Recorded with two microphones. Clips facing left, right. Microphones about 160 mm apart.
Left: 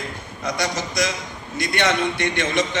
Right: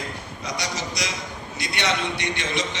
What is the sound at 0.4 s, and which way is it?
A man's voice, 50° left (ahead or behind).